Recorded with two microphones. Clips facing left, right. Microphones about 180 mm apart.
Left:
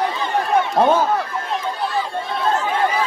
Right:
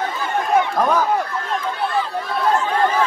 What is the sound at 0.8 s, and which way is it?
Speech, 25° left (ahead or behind).